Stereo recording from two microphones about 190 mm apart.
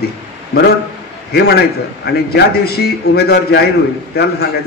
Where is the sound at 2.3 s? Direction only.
55° left (ahead or behind).